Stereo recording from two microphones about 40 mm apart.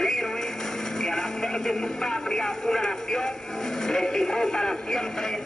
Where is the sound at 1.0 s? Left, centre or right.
Centre.